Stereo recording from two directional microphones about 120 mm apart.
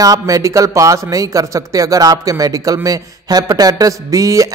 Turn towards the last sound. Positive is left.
turn(degrees=-25)  # may be behind; listen again after turning